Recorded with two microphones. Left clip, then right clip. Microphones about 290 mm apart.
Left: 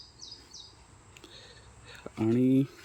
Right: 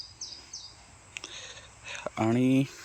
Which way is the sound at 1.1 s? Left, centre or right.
Centre.